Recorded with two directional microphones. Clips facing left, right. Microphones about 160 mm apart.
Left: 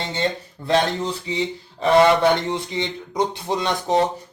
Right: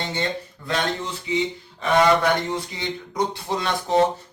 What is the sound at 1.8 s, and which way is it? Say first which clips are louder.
Speech: left 3 dB; 25° left (ahead or behind).